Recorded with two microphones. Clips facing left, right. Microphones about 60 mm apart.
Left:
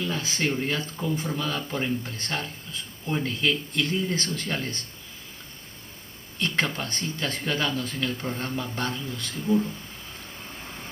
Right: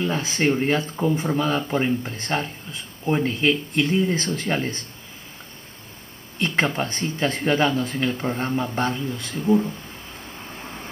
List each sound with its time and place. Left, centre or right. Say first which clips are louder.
0.0 s speech: right 6 dB; right
6.4 s speech: right 5 dB; right